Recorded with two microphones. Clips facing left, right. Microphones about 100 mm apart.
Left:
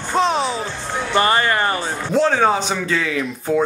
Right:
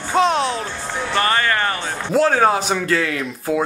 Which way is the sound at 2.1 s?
5° right (ahead or behind).